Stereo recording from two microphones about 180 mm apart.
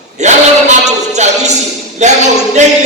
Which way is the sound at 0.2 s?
40° right (ahead or behind).